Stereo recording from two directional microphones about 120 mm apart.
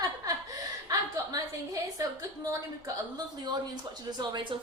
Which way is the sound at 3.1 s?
35° right (ahead or behind).